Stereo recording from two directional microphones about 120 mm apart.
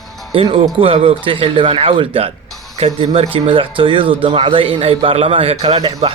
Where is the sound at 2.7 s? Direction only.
60° right (ahead or behind).